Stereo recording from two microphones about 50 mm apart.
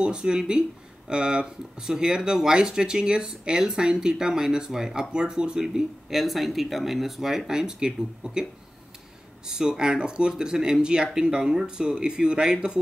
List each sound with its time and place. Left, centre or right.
0.0 s speech: centre
9.5 s speech: centre